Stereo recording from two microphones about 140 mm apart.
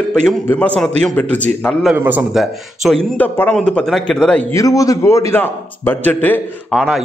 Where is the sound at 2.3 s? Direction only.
Centre (ahead or behind).